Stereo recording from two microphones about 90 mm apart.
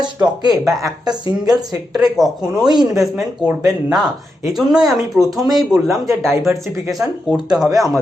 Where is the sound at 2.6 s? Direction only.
50° right (ahead or behind).